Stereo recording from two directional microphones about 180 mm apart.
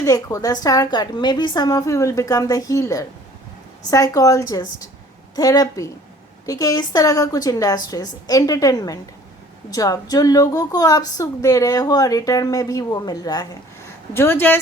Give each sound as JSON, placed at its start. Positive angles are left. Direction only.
{"t": 0.0, "sound": "a woman's voice", "side_deg": 20}